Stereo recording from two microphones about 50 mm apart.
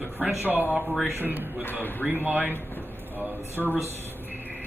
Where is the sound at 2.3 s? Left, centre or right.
Left.